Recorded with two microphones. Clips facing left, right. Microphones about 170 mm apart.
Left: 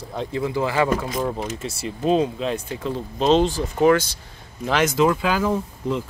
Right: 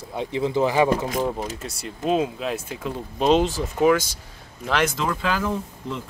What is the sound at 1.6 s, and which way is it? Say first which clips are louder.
Speech: left 4 dB; centre (ahead or behind).